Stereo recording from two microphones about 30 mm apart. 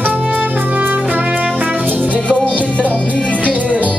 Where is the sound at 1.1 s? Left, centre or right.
Right.